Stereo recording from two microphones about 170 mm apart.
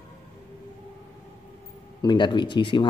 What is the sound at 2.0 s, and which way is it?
Speech, 25° left (ahead or behind).